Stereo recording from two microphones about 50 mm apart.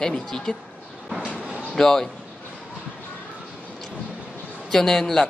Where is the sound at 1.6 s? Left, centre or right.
Centre.